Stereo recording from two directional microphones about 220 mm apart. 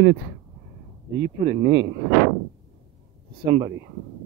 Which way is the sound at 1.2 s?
50° right (ahead or behind).